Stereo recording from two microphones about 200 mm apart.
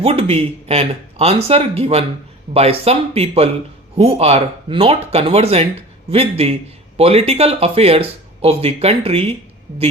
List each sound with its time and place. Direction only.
0.0 s a man's voice: 30° right (ahead or behind)